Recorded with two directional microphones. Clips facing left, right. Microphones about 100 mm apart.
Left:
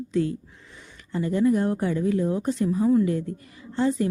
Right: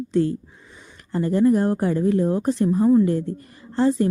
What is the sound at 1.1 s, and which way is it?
Speech, 40° right (ahead or behind).